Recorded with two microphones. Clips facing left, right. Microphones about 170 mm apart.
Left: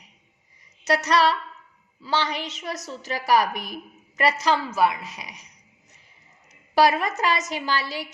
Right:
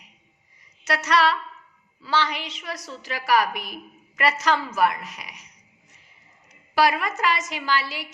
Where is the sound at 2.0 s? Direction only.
15° left (ahead or behind).